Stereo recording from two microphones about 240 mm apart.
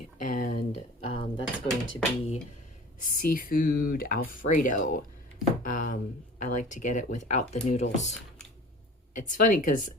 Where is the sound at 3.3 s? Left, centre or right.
Left.